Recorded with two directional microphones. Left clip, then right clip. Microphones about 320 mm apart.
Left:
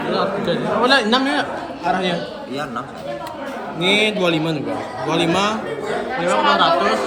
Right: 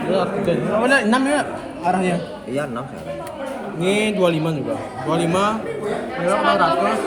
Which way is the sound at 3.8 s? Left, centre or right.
Right.